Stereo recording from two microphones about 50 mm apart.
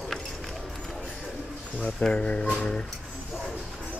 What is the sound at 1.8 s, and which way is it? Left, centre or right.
Speech, centre.